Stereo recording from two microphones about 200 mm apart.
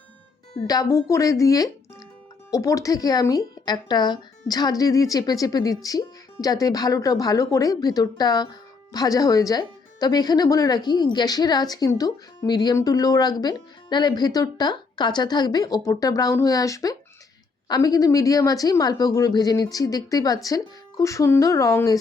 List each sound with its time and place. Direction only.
0.7 s speech: 15° left (ahead or behind)